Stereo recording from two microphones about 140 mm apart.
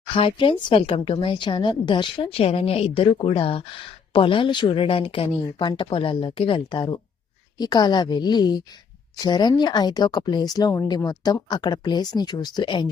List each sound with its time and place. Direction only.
0.1 s speech: 40° left (ahead or behind)